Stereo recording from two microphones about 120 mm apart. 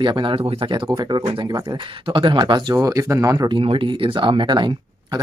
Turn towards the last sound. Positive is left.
turn(degrees=-40)  # may be behind; listen again after turning